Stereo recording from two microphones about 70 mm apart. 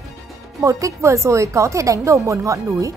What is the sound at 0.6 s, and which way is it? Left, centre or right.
Speech, right.